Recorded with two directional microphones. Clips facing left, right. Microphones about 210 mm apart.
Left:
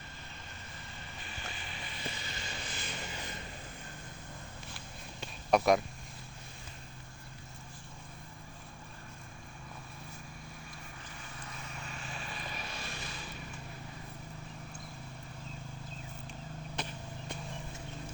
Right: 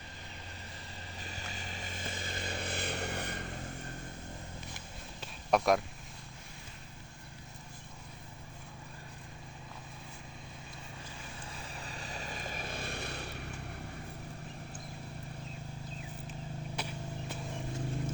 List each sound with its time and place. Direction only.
1.2 s vehicle: 40° right (ahead or behind); by 3.4 s 65° right (ahead or behind)
5.2 s a sound: centre (ahead or behind)
11.4 s vehicle: 30° right (ahead or behind); by 13.7 s 65° right (ahead or behind)
16.7 s vehicle: 10° right (ahead or behind)